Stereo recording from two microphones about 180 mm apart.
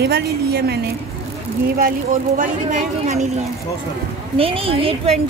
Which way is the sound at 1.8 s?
50° right (ahead or behind).